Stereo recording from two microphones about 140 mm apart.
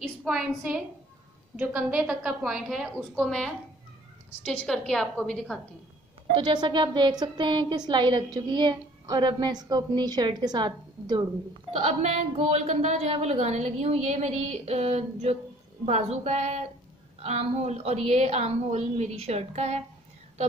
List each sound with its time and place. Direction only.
0.0 s a woman's voice: centre (ahead or behind)
6.3 s a woman's voice: 35° right (ahead or behind)
12.0 s a woman's voice: 50° right (ahead or behind)